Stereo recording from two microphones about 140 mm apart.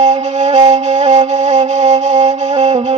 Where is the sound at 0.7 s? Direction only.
55° right (ahead or behind).